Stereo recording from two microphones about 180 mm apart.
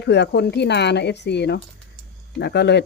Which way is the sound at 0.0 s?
70° left (ahead or behind).